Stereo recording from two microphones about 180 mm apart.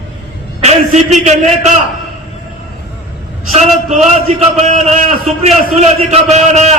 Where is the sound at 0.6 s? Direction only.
40° right (ahead or behind).